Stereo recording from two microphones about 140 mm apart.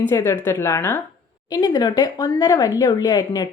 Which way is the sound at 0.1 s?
20° left (ahead or behind).